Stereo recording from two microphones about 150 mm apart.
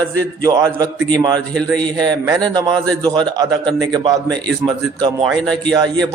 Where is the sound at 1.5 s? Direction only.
5° left (ahead or behind).